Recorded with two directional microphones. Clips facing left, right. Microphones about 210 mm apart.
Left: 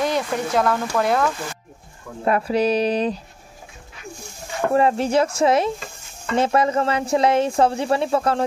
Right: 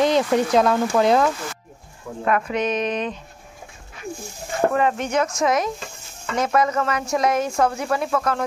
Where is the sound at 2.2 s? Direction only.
35° left (ahead or behind).